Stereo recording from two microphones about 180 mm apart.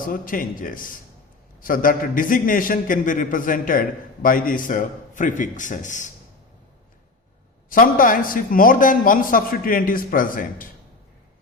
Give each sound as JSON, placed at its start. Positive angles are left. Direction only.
{"t": 0.0, "sound": "a man's voice", "side_deg": 50}
{"t": 7.7, "sound": "a man's voice", "side_deg": 50}